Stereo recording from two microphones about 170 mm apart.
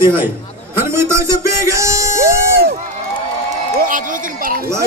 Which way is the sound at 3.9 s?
50° right (ahead or behind).